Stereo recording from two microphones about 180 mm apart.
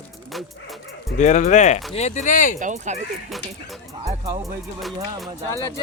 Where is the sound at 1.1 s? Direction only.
40° left (ahead or behind).